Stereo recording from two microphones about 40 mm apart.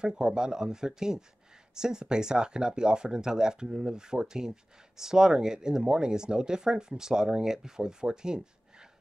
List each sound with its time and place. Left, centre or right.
0.0 s speech: right